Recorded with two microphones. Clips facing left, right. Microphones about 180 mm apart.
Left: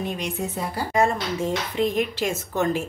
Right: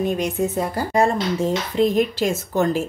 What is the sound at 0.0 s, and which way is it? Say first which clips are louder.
Speech: right 7 dB; 45° right (ahead or behind).